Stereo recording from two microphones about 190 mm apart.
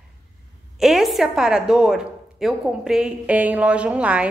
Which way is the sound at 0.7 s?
Centre (ahead or behind).